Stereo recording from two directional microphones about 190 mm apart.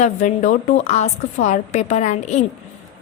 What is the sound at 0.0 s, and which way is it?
A woman's voice, 40° left (ahead or behind).